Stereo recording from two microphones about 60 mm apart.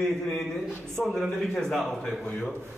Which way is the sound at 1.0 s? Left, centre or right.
Centre.